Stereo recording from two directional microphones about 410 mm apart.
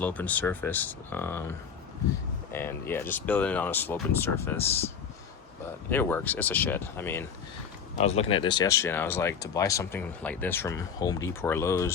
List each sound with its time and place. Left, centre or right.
0.0 s speech: centre
2.5 s speech: centre
5.9 s speech: centre